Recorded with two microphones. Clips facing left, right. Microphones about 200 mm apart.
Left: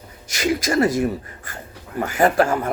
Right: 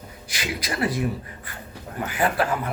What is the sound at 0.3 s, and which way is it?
Speech, 45° left (ahead or behind).